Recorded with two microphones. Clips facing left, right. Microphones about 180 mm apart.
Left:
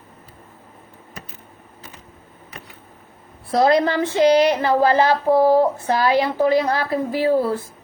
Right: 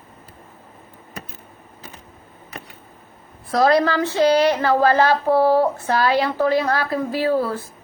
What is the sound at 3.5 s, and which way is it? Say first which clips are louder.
Speech: even; 20° left (ahead or behind).